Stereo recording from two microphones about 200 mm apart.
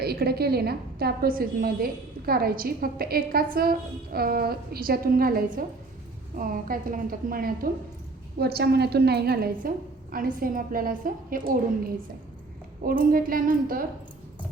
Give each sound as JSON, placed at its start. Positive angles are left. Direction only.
{"t": 0.0, "sound": "a woman's voice", "side_deg": -50}